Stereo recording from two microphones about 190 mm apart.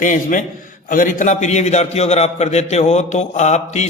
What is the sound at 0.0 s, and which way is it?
A man's voice, 40° left (ahead or behind).